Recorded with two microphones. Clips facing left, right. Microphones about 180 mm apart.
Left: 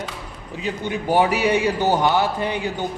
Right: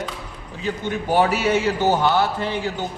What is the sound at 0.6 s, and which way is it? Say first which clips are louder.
A man's voice: even; 15° left (ahead or behind).